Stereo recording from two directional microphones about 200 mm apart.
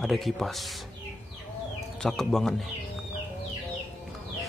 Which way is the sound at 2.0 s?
Centre (ahead or behind).